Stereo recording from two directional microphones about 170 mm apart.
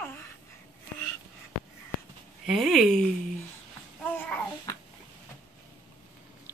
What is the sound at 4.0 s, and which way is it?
Babbling, 5° left (ahead or behind).